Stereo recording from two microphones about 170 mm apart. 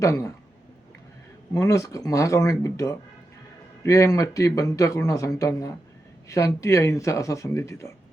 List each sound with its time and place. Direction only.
0.0 s speech: 20° left (ahead or behind)
1.5 s speech: 20° left (ahead or behind)